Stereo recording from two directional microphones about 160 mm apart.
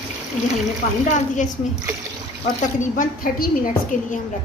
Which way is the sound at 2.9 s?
60° left (ahead or behind).